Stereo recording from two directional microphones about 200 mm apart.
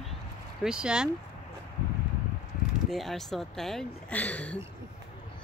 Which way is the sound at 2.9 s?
Centre (ahead or behind).